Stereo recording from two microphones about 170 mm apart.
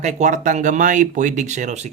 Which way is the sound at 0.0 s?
45° right (ahead or behind).